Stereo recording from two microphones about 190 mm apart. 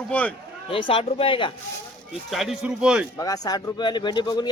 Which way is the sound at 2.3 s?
Centre (ahead or behind).